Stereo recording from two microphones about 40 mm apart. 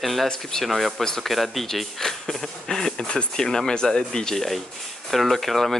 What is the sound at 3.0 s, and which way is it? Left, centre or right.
Speech, left.